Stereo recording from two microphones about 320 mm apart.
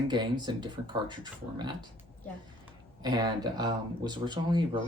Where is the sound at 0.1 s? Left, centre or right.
Centre.